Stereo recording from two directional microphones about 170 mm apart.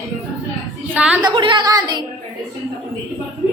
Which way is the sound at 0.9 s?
5° right (ahead or behind).